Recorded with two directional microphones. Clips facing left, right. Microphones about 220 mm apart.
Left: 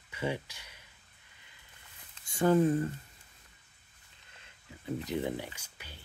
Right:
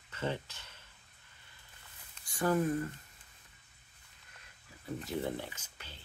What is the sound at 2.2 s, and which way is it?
Speech, 25° left (ahead or behind).